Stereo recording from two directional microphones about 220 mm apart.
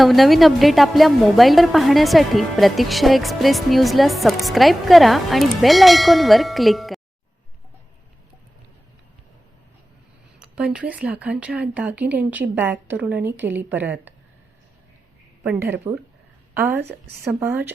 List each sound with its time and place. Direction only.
0.0 s a woman's voice: centre (ahead or behind)
10.4 s a woman's voice: 5° right (ahead or behind)
15.4 s a woman's voice: 10° right (ahead or behind)
16.8 s a woman's voice: 50° right (ahead or behind)
17.4 s a woman's voice: 10° right (ahead or behind)